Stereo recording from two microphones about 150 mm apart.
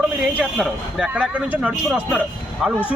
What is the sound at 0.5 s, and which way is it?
Speech, centre (ahead or behind).